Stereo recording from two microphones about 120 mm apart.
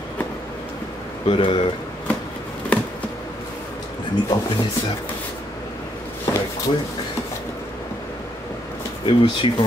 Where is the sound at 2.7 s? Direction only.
10° left (ahead or behind).